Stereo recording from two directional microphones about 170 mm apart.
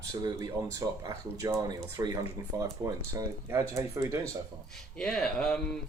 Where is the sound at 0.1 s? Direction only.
20° right (ahead or behind).